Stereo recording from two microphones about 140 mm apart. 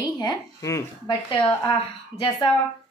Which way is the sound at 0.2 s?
25° left (ahead or behind).